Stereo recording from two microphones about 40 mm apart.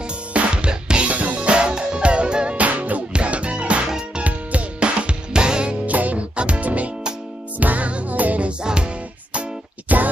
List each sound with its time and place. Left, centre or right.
0.3 s music: right
1.0 s music: right
2.5 s music: right
5.9 s music: right
6.3 s music: right
8.6 s music: right
9.9 s a sound: right